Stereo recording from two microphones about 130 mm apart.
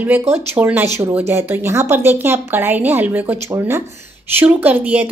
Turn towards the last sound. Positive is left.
turn(degrees=-10)  # may be behind; listen again after turning